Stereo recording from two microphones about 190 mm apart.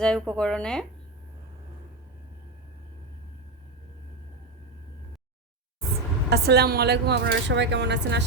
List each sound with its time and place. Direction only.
0.0 s a woman's voice: 5° left (ahead or behind)
6.3 s speech: 60° right (ahead or behind)